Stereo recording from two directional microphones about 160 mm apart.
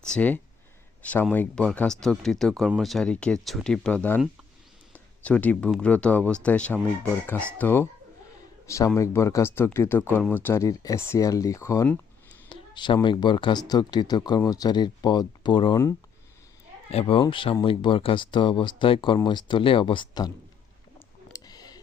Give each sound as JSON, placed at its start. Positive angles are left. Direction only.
{"t": 0.0, "sound": "speech", "side_deg": 5}
{"t": 5.2, "sound": "a man's voice", "side_deg": 10}
{"t": 12.5, "sound": "speech", "side_deg": 30}
{"t": 16.9, "sound": "speech", "side_deg": 35}
{"t": 21.3, "sound": "a sound", "side_deg": 25}